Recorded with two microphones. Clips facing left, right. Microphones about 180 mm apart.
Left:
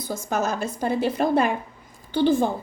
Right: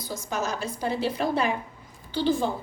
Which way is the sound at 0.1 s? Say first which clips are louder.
Left 5 dB; 50° left (ahead or behind).